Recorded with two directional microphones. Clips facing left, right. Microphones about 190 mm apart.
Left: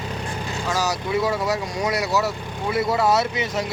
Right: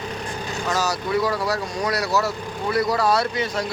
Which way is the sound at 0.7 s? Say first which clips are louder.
Even; 15° left (ahead or behind).